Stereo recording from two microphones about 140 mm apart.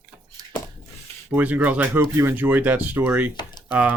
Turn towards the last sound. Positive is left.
turn(degrees=-10)  # may be behind; listen again after turning